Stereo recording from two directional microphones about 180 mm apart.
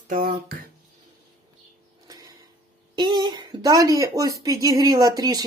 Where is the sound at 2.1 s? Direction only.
20° right (ahead or behind).